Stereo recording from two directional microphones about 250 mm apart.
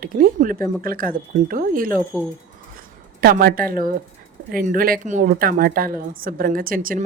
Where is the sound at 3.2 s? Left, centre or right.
Right.